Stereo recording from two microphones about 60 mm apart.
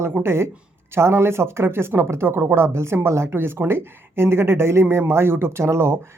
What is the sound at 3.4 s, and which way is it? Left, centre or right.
Speech, right.